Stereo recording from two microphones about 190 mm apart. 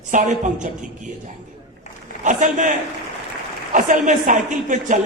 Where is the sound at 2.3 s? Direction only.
40° right (ahead or behind).